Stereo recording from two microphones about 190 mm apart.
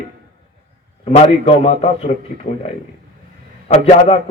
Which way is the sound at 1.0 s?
30° left (ahead or behind).